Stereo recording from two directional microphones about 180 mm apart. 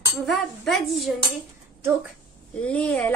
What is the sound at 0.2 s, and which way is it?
Speech, centre (ahead or behind).